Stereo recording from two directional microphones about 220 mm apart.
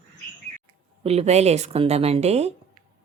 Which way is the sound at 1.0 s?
30° right (ahead or behind).